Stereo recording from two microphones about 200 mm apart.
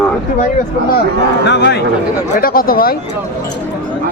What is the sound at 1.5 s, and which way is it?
Speech, 55° left (ahead or behind).